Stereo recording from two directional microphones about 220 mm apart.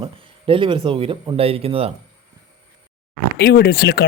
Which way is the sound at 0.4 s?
25° right (ahead or behind).